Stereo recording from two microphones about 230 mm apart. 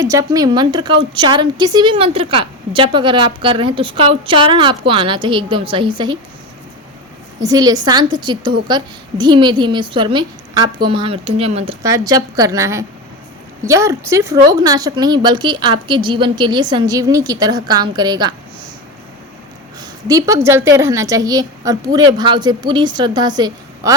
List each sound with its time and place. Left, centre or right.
0.0 s a woman's voice: centre
7.4 s a woman's voice: centre
20.1 s a woman's voice: centre